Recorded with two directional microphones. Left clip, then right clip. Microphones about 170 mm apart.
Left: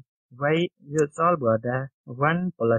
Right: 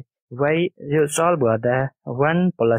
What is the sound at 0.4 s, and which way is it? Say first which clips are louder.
Speech: right 4 dB; 35° right (ahead or behind).